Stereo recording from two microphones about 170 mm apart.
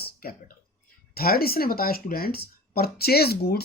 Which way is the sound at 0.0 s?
60° left (ahead or behind).